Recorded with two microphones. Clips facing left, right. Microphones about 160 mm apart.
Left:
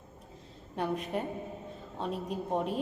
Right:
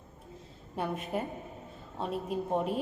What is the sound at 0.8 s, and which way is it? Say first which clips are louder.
A woman's voice: left 1 dB; centre (ahead or behind).